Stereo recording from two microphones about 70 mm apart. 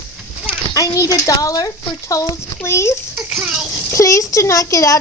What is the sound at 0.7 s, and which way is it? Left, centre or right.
Speech, left.